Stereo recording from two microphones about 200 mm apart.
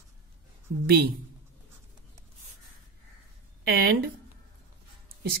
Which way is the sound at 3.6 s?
50° right (ahead or behind).